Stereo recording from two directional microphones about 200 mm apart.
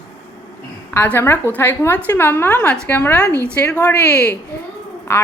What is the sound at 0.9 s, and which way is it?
A woman's voice, 10° left (ahead or behind).